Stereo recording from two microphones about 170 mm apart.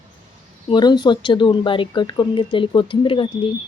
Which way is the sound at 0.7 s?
25° left (ahead or behind).